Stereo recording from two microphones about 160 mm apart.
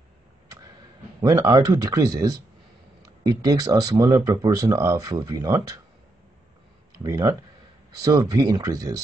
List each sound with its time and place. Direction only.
1.2 s speech: 20° right (ahead or behind)
7.0 s speech: 20° right (ahead or behind)